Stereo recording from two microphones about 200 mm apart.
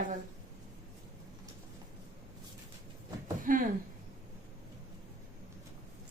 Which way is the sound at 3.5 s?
40° right (ahead or behind).